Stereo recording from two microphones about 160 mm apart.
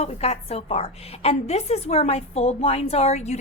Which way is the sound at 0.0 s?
40° left (ahead or behind).